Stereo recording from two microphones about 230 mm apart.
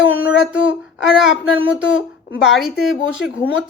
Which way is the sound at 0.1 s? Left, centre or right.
Centre.